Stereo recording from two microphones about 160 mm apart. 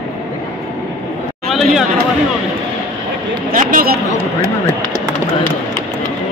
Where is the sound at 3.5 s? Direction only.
65° right (ahead or behind).